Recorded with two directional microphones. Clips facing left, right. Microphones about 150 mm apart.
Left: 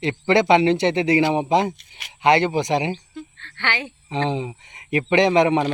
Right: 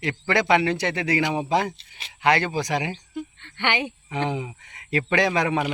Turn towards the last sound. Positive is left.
turn(degrees=20)  # may be behind; listen again after turning